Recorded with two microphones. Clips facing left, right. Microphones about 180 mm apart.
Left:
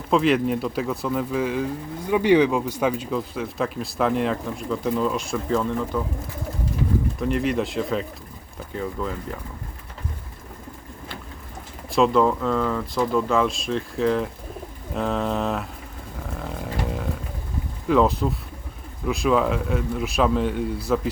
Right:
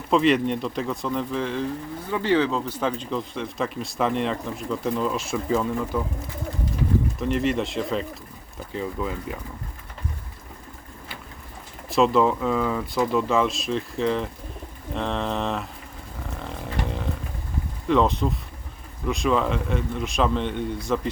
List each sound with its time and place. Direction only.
0.1 s speech: centre (ahead or behind)
7.2 s speech: centre (ahead or behind)
11.9 s speech: centre (ahead or behind)
16.4 s a sound: 5° left (ahead or behind)
17.8 s speech: 5° left (ahead or behind)